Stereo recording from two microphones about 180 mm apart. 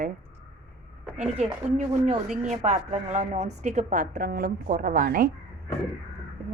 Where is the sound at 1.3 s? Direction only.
35° right (ahead or behind).